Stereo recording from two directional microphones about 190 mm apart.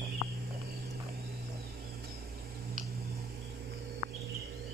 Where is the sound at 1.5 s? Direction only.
55° right (ahead or behind).